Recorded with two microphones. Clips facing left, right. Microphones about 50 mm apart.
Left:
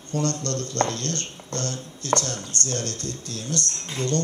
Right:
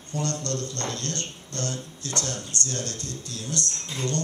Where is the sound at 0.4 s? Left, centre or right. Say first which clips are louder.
Left 5 dB; left.